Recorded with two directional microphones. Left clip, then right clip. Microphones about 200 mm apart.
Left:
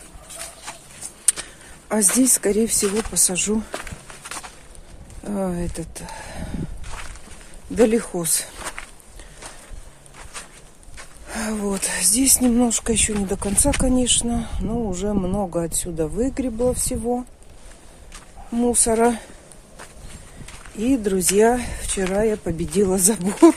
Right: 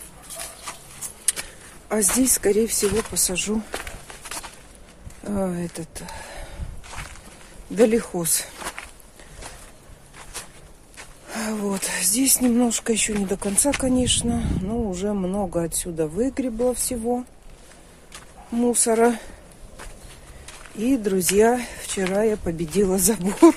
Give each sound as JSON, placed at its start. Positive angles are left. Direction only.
{"t": 0.3, "sound": "a sound", "side_deg": 0}
{"t": 1.3, "sound": "a sound", "side_deg": 15}
{"t": 2.1, "sound": "speech", "side_deg": 10}
{"t": 3.7, "sound": "walk", "side_deg": 0}
{"t": 5.2, "sound": "chicken", "side_deg": 5}
{"t": 6.9, "sound": "walk", "side_deg": 0}
{"t": 7.7, "sound": "a sound", "side_deg": 10}
{"t": 11.0, "sound": "speech", "side_deg": 10}
{"t": 20.7, "sound": "speech", "side_deg": 10}